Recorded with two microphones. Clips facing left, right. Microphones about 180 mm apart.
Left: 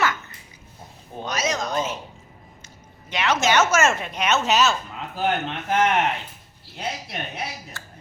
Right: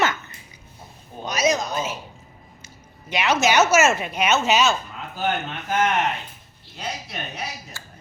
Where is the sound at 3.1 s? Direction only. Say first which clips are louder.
Right 1 dB; 10° right (ahead or behind).